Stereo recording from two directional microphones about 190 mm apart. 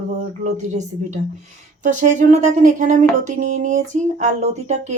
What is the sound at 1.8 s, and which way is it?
Speech, 40° right (ahead or behind).